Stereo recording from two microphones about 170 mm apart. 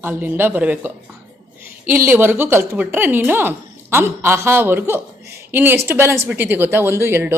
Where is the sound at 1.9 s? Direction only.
10° right (ahead or behind).